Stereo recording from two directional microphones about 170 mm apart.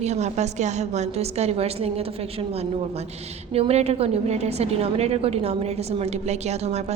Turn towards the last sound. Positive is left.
turn(degrees=-40)  # may be behind; listen again after turning